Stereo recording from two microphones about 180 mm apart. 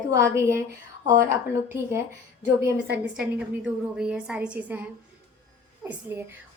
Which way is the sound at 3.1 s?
5° right (ahead or behind).